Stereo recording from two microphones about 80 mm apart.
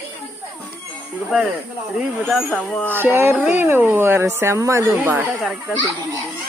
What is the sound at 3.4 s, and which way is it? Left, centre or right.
A man's voice, right.